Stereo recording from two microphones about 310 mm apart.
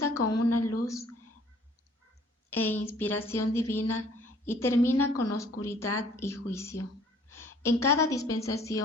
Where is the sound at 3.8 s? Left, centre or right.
Left.